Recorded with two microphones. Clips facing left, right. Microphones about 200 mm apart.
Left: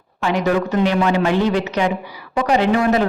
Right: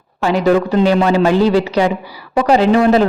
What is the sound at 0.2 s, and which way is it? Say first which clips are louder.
Speech: right 5 dB; 35° right (ahead or behind).